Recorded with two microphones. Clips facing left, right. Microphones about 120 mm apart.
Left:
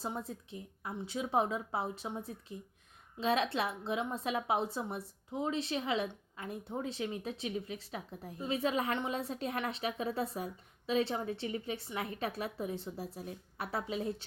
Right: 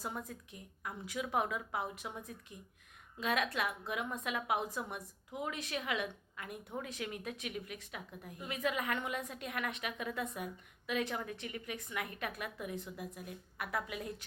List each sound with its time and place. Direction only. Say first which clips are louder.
0.0 s a woman's voice: left 3 dB; 30° left (ahead or behind)